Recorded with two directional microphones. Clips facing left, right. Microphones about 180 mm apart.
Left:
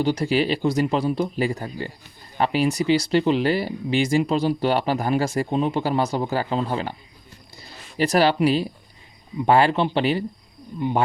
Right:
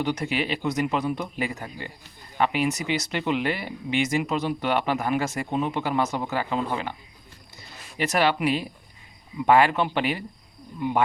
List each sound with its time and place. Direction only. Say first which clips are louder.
0.0 s speech: left 5 dB; 30° left (ahead or behind)
7.5 s a sound: left 6 dB; 35° left (ahead or behind)
9.5 s a man's voice: left 1 dB; 30° left (ahead or behind)